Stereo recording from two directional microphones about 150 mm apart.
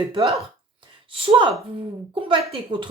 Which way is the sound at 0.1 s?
40° right (ahead or behind).